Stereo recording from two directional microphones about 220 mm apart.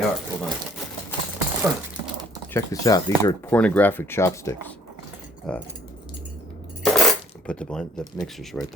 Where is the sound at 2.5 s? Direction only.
15° left (ahead or behind).